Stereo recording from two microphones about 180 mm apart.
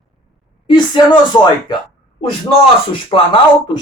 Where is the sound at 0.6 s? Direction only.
25° left (ahead or behind).